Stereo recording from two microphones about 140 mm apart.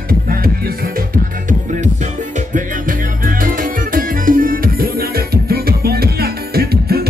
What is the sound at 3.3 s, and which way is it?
Music, 80° right.